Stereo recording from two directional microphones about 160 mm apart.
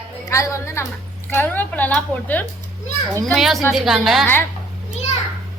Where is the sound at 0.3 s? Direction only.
20° left (ahead or behind).